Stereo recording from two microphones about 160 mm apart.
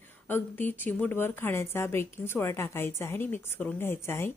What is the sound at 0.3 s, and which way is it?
Speech, 10° left (ahead or behind).